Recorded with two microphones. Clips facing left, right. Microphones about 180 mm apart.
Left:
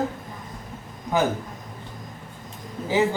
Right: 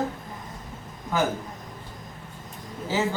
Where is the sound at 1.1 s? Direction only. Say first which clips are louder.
Left 3 dB; 20° left (ahead or behind).